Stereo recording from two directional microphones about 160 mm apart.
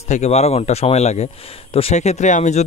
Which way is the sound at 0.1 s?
45° left (ahead or behind).